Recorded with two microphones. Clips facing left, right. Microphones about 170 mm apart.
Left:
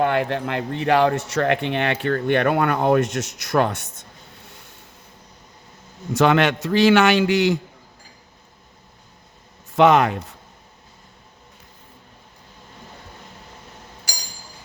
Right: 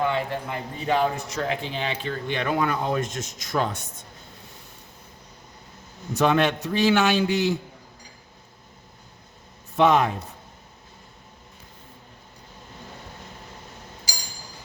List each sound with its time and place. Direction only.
0.0 s speech: 65° left (ahead or behind)
6.1 s a man's voice: 90° left
9.7 s speech: 90° left